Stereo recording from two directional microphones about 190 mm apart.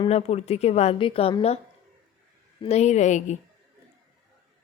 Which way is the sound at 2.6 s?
35° left (ahead or behind).